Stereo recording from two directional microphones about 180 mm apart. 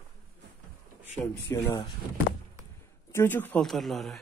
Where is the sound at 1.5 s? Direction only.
15° left (ahead or behind).